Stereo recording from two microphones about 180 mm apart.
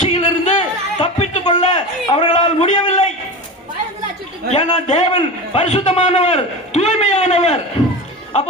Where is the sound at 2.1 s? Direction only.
40° left (ahead or behind).